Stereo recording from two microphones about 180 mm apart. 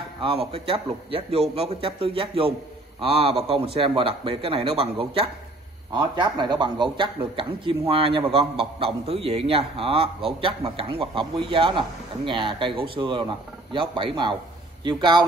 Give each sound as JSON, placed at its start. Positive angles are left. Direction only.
{"t": 0.2, "sound": "a man's voice", "side_deg": -30}